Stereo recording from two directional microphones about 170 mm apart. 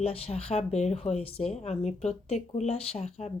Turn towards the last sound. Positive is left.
turn(degrees=40)  # may be behind; listen again after turning